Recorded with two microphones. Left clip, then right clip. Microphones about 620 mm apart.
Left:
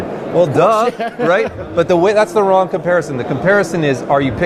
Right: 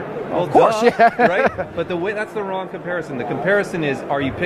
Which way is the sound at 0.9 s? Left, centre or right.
Right.